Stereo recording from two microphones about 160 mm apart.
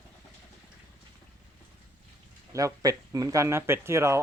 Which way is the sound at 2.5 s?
20° right (ahead or behind).